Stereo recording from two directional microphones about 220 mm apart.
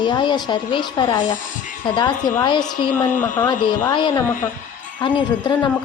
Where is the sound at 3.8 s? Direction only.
20° left (ahead or behind).